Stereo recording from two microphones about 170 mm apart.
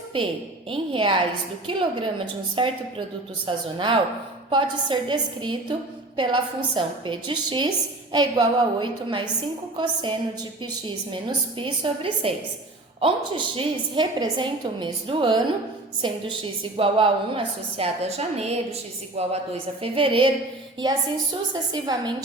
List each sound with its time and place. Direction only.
0.7 s a woman's voice: 30° right (ahead or behind)
16.7 s a woman's voice: 35° right (ahead or behind)
21.5 s a woman's voice: 25° right (ahead or behind)